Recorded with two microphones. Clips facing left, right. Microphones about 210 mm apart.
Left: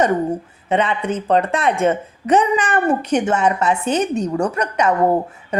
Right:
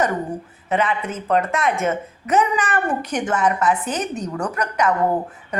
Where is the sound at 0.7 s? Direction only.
30° left (ahead or behind).